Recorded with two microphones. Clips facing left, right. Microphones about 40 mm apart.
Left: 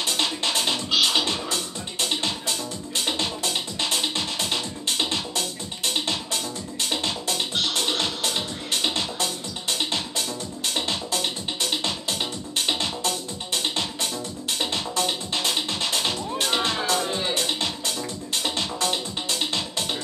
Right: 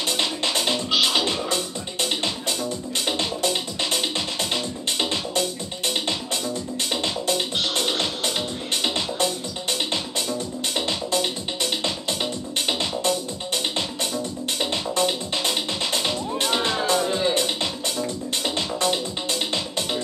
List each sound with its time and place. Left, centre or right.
0.2 s music: right
7.2 s music: right
14.6 s music: right